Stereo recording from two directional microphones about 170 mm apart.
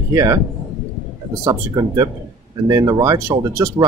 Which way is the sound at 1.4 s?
20° right (ahead or behind).